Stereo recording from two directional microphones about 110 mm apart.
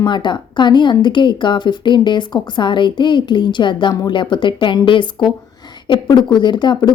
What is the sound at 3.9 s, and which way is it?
Speech, 35° left (ahead or behind).